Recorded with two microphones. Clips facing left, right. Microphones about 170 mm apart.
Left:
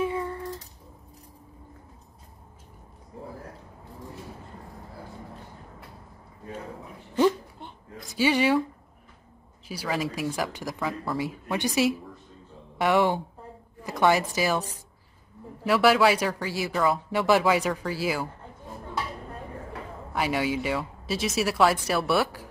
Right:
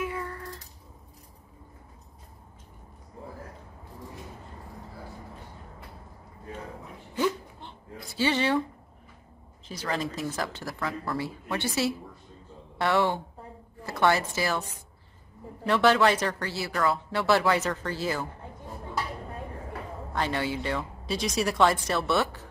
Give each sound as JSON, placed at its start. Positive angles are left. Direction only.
{"t": 0.0, "sound": "music", "side_deg": 25}
{"t": 8.2, "sound": "speech", "side_deg": 10}
{"t": 9.7, "sound": "a woman's voice", "side_deg": 10}
{"t": 15.6, "sound": "speech", "side_deg": 5}
{"t": 19.7, "sound": "speech", "side_deg": 10}